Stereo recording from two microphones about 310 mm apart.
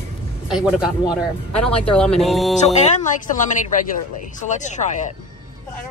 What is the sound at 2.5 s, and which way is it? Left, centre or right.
Speech, left.